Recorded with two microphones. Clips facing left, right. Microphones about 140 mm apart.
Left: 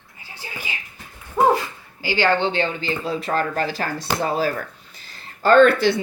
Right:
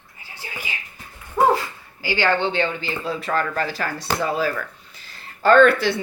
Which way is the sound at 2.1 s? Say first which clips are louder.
Left 1 dB; 30° left (ahead or behind).